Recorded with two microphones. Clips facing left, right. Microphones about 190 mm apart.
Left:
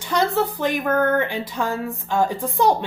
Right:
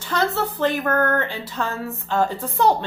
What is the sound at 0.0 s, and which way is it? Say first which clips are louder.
Speech: left 2 dB; 15° left (ahead or behind).